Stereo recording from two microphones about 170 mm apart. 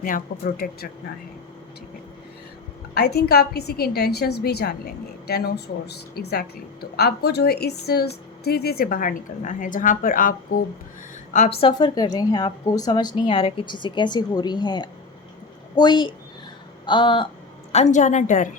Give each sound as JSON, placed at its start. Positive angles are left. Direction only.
{"t": 0.0, "sound": "a woman's voice", "side_deg": 55}
{"t": 2.9, "sound": "a woman's voice", "side_deg": 70}
{"t": 11.3, "sound": "a woman's voice", "side_deg": 35}
{"t": 11.7, "sound": "a woman's voice", "side_deg": 25}
{"t": 17.7, "sound": "a woman's voice", "side_deg": 40}